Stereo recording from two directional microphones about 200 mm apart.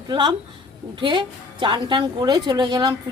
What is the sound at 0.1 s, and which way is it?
A woman's voice, 20° right (ahead or behind).